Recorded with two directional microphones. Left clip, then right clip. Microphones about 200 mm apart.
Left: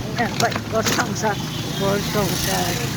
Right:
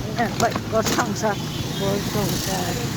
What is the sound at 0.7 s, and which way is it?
Speech, 40° right (ahead or behind).